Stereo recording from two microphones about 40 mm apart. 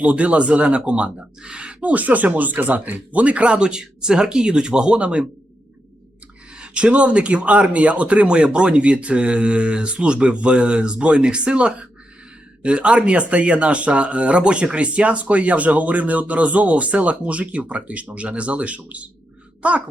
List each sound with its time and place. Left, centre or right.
0.0 s speech: right
1.9 s speech: right
6.5 s speech: right